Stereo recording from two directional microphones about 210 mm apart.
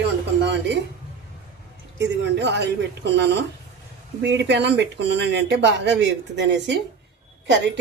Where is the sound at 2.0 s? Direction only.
55° right (ahead or behind).